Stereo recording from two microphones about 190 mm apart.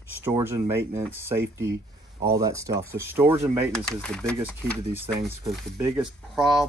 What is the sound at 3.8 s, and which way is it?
Speech, 5° left (ahead or behind).